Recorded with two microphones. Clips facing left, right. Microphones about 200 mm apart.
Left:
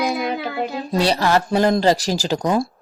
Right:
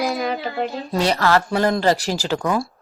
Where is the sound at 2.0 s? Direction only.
40° left (ahead or behind).